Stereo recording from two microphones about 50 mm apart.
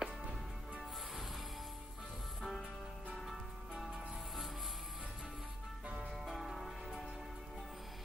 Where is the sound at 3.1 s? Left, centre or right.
Centre.